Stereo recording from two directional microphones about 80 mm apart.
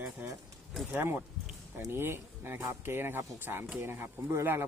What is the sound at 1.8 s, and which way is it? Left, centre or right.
Speech, right.